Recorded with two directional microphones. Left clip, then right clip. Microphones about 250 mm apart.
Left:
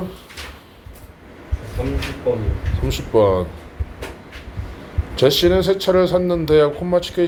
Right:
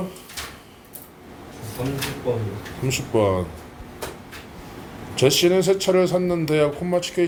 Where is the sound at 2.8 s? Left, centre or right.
Centre.